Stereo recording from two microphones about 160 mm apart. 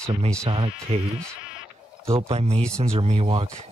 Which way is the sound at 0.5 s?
35° right (ahead or behind).